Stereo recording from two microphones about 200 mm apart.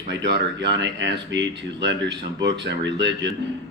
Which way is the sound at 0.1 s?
60° right (ahead or behind).